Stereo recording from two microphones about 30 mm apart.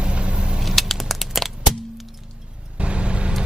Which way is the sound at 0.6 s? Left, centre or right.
Centre.